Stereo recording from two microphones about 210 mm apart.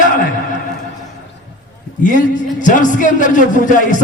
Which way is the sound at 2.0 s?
35° left (ahead or behind).